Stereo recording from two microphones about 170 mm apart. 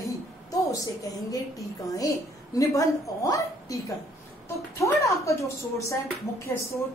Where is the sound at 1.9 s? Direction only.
20° left (ahead or behind).